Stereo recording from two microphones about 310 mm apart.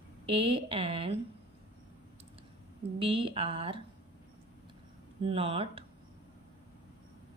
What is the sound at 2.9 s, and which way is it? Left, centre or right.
Speech, centre.